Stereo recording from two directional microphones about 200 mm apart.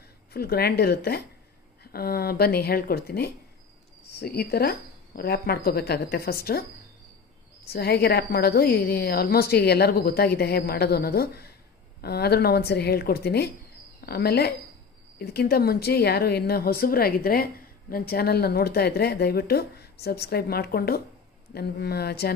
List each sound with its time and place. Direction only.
0.3 s speech: 50° left (ahead or behind)
7.6 s speech: 50° left (ahead or behind)